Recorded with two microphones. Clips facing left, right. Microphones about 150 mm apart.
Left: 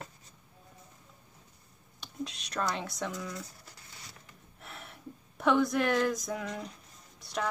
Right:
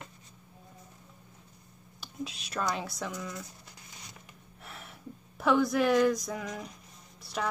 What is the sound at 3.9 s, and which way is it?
Zipper, 20° right (ahead or behind).